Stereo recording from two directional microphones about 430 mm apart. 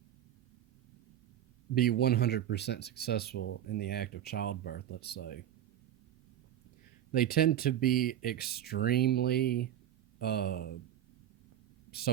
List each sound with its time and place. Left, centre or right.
1.7 s speech: left
7.1 s speech: left
11.9 s speech: left